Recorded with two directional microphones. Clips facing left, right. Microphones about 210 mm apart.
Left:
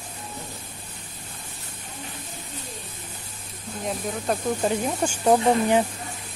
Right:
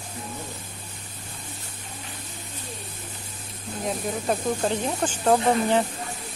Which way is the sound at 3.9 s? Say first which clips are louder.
Right 1 dB; 5° left (ahead or behind).